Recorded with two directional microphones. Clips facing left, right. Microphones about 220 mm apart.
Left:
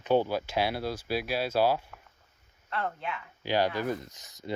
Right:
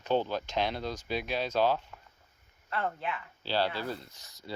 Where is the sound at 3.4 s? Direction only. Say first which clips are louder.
Left 4 dB; 15° left (ahead or behind).